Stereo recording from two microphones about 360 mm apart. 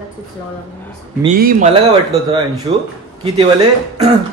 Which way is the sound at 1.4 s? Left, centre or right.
Right.